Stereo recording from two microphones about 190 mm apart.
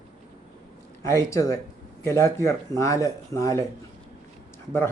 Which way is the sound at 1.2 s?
15° left (ahead or behind).